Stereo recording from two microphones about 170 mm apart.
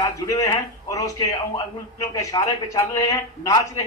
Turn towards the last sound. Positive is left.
turn(degrees=20)  # may be behind; listen again after turning